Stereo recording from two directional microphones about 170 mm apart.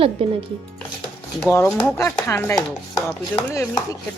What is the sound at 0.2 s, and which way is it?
Speech, 30° right (ahead or behind).